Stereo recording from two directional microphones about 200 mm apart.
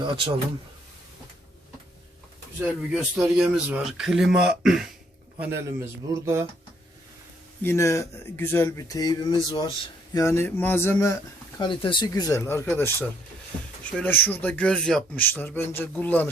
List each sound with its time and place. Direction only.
2.6 s speech: 5° right (ahead or behind)
5.4 s a man's voice: 10° right (ahead or behind)
7.6 s speech: 15° left (ahead or behind)
11.6 s speech: 25° left (ahead or behind); by 16.3 s 10° left (ahead or behind)